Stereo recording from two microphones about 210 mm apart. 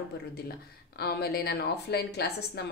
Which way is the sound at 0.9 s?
50° left (ahead or behind).